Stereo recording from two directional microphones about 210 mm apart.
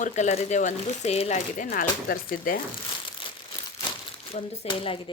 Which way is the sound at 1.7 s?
45° left (ahead or behind).